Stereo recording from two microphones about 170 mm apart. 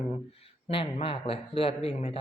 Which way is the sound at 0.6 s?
35° left (ahead or behind).